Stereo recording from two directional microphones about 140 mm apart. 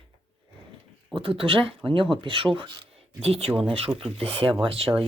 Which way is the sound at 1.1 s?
40° right (ahead or behind).